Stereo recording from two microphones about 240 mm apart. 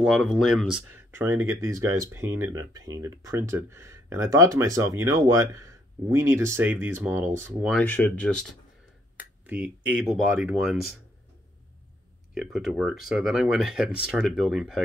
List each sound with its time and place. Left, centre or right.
0.0 s speech: centre
7.7 s speech: centre
9.5 s speech: centre
12.4 s speech: centre